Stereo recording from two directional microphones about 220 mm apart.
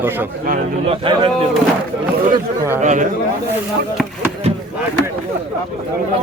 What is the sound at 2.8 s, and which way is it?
Speech, 35° right (ahead or behind).